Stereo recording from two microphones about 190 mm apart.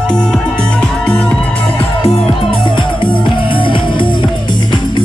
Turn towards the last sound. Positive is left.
turn(degrees=25)  # may be behind; listen again after turning